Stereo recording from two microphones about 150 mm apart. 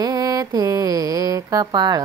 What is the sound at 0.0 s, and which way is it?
Mantra, 25° right (ahead or behind).